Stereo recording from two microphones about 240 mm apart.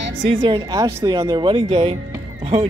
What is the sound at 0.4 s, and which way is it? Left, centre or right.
Speech, centre.